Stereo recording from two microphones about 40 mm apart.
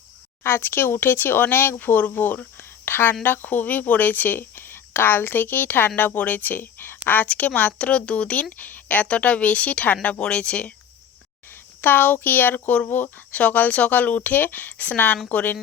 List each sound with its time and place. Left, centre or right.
0.4 s speech: left
2.6 s a sound: left
3.2 s speech: left
6.7 s a sound: left
7.0 s speech: left
8.5 s speech: left
9.0 s speech: left
11.5 s speech: left
13.3 s speech: left